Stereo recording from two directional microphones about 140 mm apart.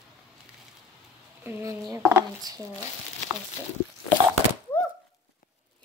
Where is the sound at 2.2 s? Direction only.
30° right (ahead or behind).